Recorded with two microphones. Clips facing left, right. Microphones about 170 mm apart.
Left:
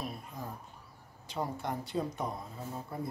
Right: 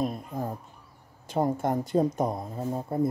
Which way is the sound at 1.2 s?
50° right (ahead or behind).